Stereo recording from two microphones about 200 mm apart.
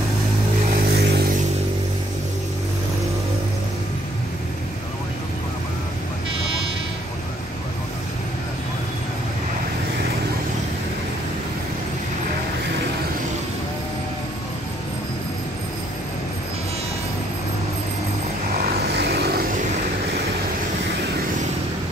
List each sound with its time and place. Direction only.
0.7 s vehicle: 50° right (ahead or behind)
18.5 s vehicle: 50° right (ahead or behind)